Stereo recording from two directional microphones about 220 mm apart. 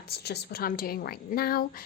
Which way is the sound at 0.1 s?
45° left (ahead or behind).